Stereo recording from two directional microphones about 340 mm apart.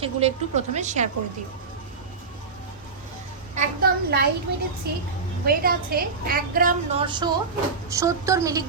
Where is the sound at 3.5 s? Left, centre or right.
Right.